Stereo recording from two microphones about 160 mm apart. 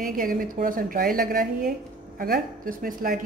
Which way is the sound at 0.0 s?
60° right (ahead or behind).